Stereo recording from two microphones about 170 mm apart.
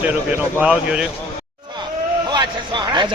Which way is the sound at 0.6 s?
5° right (ahead or behind).